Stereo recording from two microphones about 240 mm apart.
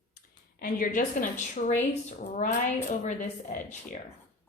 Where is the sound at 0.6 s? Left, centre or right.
Left.